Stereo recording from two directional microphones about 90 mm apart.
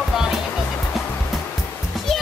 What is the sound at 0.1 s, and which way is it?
Music, 5° right (ahead or behind).